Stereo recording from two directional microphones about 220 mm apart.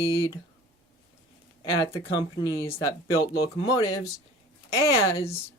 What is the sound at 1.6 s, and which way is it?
A woman's voice, 20° left (ahead or behind).